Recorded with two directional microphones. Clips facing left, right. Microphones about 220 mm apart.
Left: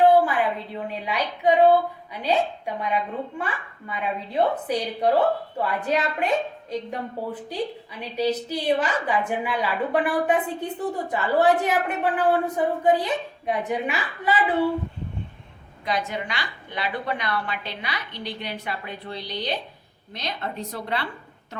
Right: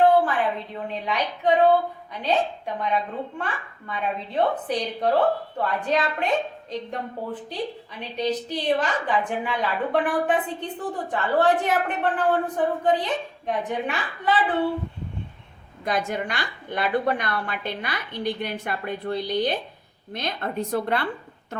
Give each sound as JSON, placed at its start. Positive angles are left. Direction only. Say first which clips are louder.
{"t": 0.1, "sound": "a woman's voice", "louder": "left 1 dB", "side_deg": 10}
{"t": 8.1, "sound": "a woman's voice", "louder": "left 2 dB", "side_deg": 10}
{"t": 15.8, "sound": "a woman's voice", "louder": "right 2 dB", "side_deg": -50}